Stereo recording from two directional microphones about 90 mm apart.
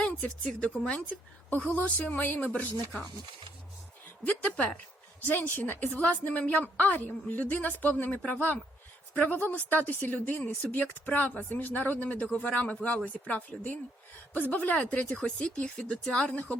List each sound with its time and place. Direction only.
0.0 s a woman's voice: 15° left (ahead or behind)
4.2 s a woman's voice: 15° left (ahead or behind)